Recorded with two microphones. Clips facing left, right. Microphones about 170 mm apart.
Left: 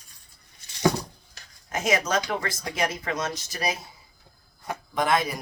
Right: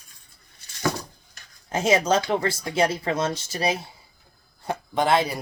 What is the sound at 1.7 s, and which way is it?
Speech, 30° right (ahead or behind).